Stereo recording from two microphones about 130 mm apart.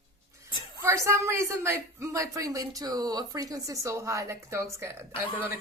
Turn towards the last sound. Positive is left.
turn(degrees=-20)  # may be behind; listen again after turning